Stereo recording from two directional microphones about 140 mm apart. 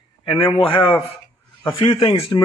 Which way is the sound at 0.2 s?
35° left (ahead or behind).